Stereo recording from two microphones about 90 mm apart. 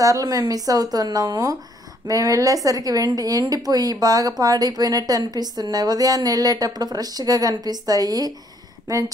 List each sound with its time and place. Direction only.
0.0 s a woman's voice: 40° right (ahead or behind)